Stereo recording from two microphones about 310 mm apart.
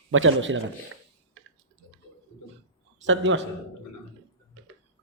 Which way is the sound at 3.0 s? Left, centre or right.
Right.